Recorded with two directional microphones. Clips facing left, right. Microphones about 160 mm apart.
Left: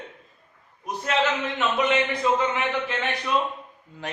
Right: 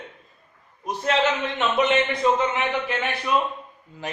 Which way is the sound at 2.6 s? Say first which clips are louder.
Right 1 dB; 10° right (ahead or behind).